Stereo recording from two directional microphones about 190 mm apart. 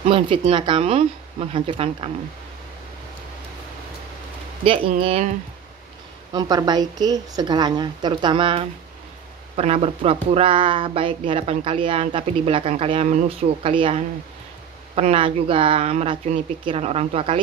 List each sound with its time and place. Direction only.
0.0 s speech: 30° right (ahead or behind)
4.6 s speech: 30° right (ahead or behind)
6.3 s speech: 20° right (ahead or behind)